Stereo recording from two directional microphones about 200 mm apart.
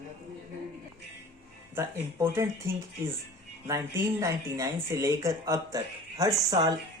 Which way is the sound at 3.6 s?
15° right (ahead or behind).